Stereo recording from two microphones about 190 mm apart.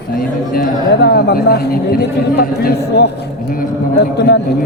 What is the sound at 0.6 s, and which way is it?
A man's voice, 60° left (ahead or behind).